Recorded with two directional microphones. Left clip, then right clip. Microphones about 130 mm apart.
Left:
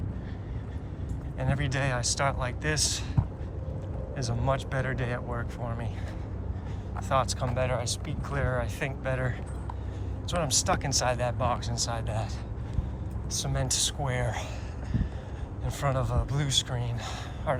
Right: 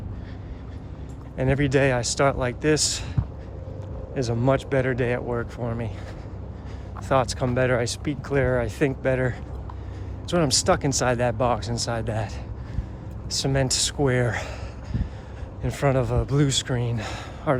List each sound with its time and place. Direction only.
1.4 s speech: 60° right (ahead or behind)
4.1 s speech: 55° right (ahead or behind)
4.4 s speech: 70° right (ahead or behind); by 5.9 s 50° right (ahead or behind)
7.1 s speech: 60° right (ahead or behind); by 8.4 s 90° right
8.4 s speech: 65° right (ahead or behind); by 12.3 s 80° right
13.3 s speech: 80° right
15.6 s speech: 65° right (ahead or behind)